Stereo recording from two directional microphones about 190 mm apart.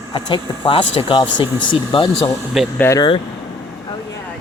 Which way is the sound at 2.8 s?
15° left (ahead or behind).